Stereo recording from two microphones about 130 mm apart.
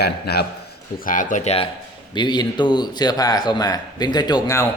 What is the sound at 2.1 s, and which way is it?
A man's voice, 35° left (ahead or behind).